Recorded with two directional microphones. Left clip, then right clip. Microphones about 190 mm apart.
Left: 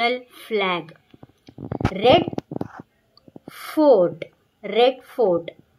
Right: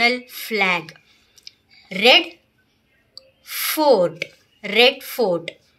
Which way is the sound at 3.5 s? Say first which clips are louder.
Even; 35° left (ahead or behind).